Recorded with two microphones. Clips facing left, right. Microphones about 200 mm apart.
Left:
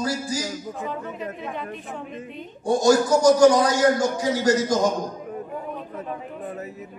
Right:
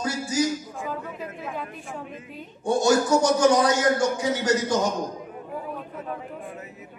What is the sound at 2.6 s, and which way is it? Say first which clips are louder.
A man's voice: left 2 dB; 40° left (ahead or behind).